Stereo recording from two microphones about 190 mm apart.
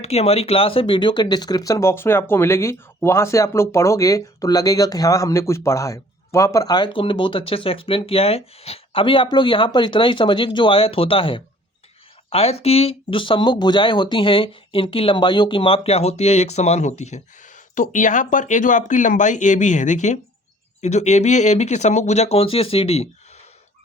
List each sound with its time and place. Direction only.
0.0 s speech: 35° left (ahead or behind)